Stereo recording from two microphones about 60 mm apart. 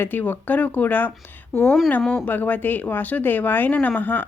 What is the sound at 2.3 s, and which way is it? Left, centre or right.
Speech, left.